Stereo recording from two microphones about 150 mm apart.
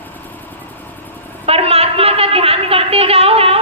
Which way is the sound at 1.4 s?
40° right (ahead or behind).